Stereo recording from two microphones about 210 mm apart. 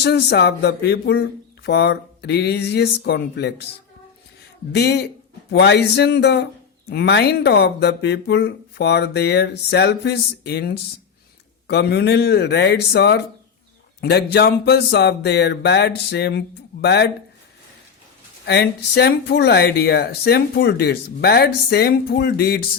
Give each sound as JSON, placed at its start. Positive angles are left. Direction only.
{"t": 0.0, "sound": "speech", "side_deg": 55}
{"t": 4.7, "sound": "speech", "side_deg": 55}
{"t": 18.4, "sound": "speech", "side_deg": 50}